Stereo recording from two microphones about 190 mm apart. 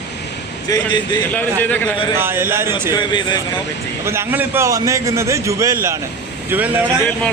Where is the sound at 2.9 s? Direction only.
25° left (ahead or behind).